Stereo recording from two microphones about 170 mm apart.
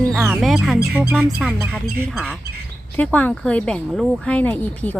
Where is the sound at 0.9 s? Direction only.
10° right (ahead or behind).